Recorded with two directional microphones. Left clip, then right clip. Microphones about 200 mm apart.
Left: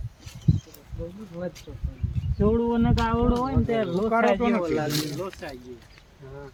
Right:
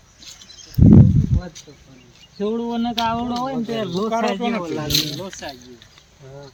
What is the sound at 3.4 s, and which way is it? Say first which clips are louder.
Speech: right 1 dB; 50° right (ahead or behind).